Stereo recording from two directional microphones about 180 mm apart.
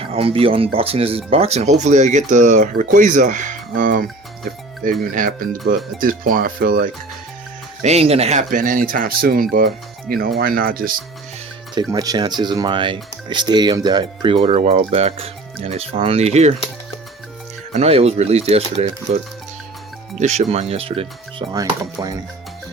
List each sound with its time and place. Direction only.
0.0 s speech: 30° right (ahead or behind); by 6.9 s 55° right (ahead or behind)
7.8 s speech: 35° right (ahead or behind); by 10.9 s 55° right (ahead or behind)
11.7 s speech: 20° right (ahead or behind)
17.7 s speech: 35° right (ahead or behind)